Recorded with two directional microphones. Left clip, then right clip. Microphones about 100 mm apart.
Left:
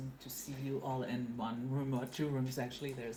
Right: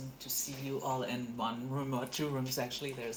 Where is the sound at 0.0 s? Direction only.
55° right (ahead or behind).